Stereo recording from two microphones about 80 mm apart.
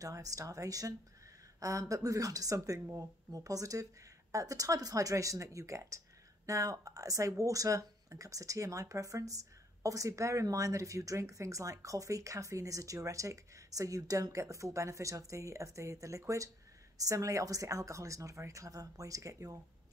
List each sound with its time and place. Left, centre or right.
0.0 s speech: right